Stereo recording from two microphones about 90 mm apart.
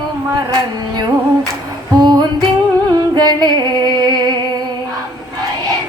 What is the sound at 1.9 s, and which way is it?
Female singing, 50° right (ahead or behind).